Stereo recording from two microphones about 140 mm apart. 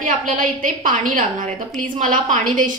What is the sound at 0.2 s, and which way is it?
A woman's voice, 70° right (ahead or behind).